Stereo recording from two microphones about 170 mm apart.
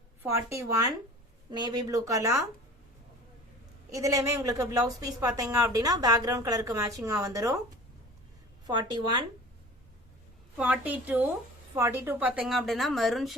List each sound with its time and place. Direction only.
0.2 s a woman's voice: 15° right (ahead or behind)
3.9 s a woman's voice: 20° right (ahead or behind)
8.6 s a woman's voice: 25° right (ahead or behind)
10.6 s a woman's voice: 10° right (ahead or behind)